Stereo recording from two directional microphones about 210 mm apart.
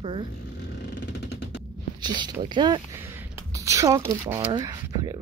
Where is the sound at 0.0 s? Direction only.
25° right (ahead or behind).